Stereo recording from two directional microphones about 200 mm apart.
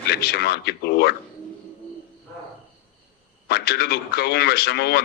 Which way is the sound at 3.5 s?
55° left (ahead or behind).